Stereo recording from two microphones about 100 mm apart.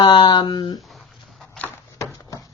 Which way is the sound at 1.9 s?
30° left (ahead or behind).